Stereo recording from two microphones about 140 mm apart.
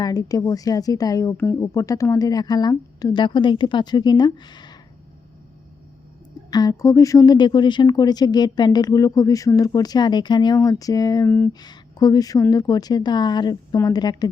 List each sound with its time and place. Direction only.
0.0 s a woman's voice: 25° left (ahead or behind)
6.5 s a woman's voice: 25° left (ahead or behind)
11.6 s a woman's voice: 30° left (ahead or behind)